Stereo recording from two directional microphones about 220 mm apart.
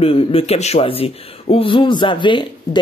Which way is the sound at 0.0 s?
25° left (ahead or behind).